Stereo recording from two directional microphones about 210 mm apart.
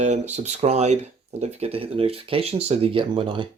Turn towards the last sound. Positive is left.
turn(degrees=-25)  # may be behind; listen again after turning